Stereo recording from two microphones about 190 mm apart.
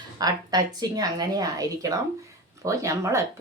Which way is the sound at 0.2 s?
20° right (ahead or behind).